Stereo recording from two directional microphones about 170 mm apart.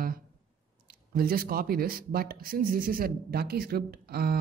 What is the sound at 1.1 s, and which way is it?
Speech, 60° right (ahead or behind).